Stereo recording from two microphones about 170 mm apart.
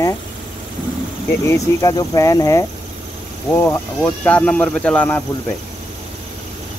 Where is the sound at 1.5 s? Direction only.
20° left (ahead or behind).